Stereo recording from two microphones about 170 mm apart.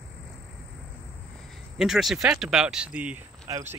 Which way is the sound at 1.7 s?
Centre (ahead or behind).